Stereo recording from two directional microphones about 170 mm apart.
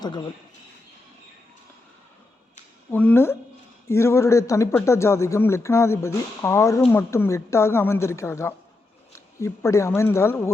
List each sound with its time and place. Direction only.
0.0 s speech: 25° left (ahead or behind)
2.9 s speech: 10° left (ahead or behind)